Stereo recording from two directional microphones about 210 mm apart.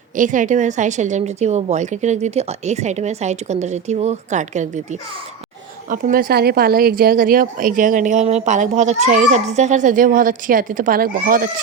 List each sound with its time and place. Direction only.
0.2 s a woman's voice: 35° right (ahead or behind)